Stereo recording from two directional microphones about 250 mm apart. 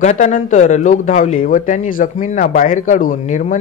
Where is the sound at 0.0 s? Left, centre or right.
Left.